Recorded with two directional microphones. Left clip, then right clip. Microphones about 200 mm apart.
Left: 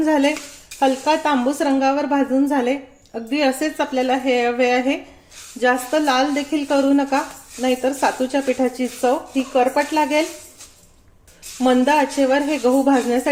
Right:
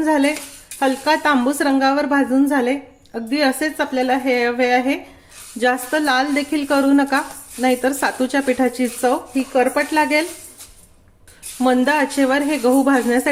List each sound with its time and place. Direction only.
0.0 s speech: 10° right (ahead or behind)
11.6 s speech: 15° right (ahead or behind)